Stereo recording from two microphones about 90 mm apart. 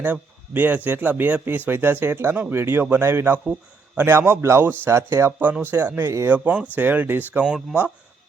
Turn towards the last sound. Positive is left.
turn(degrees=-10)  # may be behind; listen again after turning